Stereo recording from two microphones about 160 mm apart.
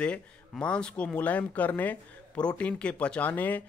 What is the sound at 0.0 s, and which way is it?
Speech, 5° left (ahead or behind).